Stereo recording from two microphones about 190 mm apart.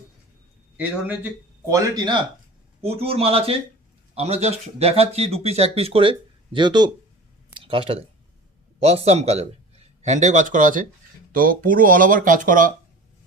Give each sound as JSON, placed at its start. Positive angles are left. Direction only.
{"t": 0.8, "sound": "speech", "side_deg": -10}
{"t": 1.7, "sound": "speech", "side_deg": -25}
{"t": 7.5, "sound": "a sound", "side_deg": -30}
{"t": 8.8, "sound": "speech", "side_deg": -35}